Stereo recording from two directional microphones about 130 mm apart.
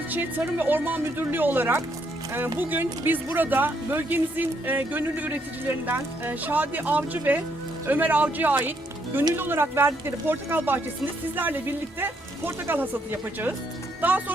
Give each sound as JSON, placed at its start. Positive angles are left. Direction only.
{"t": 0.1, "sound": "speech", "side_deg": -15}